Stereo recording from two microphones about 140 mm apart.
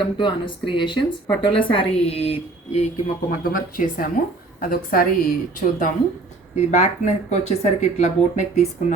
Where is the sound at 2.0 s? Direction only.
45° left (ahead or behind).